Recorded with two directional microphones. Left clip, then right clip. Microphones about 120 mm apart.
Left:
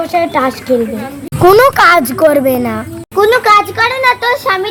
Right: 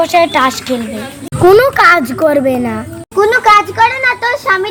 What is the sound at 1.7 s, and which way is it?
A woman's voice, 20° left (ahead or behind).